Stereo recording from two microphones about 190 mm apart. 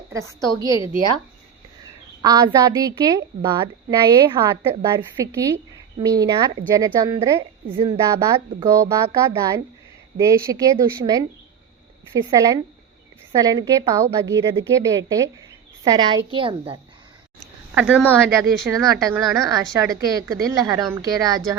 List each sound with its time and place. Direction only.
0.1 s a woman's voice: 15° right (ahead or behind)
2.2 s a woman's voice: 20° right (ahead or behind)
17.7 s a woman's voice: 5° right (ahead or behind)
18.3 s a woman's voice: 15° right (ahead or behind)